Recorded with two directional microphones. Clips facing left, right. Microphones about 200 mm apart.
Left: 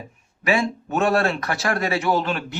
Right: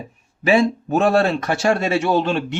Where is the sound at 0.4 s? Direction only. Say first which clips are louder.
Right 6 dB; 30° right (ahead or behind).